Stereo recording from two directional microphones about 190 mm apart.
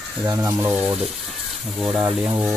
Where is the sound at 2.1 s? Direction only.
10° right (ahead or behind).